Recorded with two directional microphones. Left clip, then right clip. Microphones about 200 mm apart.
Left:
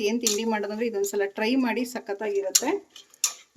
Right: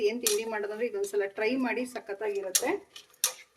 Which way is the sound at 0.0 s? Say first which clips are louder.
Left 3 dB; 55° left (ahead or behind).